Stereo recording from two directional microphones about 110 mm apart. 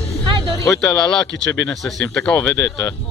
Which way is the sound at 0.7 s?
5° left (ahead or behind).